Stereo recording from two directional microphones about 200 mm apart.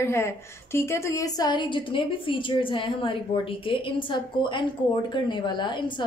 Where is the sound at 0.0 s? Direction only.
15° left (ahead or behind).